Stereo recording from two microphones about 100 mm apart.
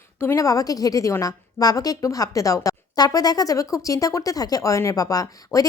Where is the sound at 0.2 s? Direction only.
30° left (ahead or behind).